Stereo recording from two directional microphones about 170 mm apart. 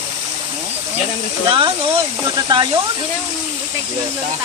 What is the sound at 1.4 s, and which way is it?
Speech, 30° right (ahead or behind).